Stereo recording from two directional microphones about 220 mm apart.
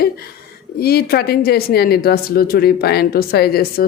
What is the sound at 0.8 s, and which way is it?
Speech, 45° left (ahead or behind).